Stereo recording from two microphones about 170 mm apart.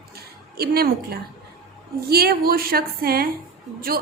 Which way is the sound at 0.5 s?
65° right (ahead or behind).